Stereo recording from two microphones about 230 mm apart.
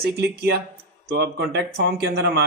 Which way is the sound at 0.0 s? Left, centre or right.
Right.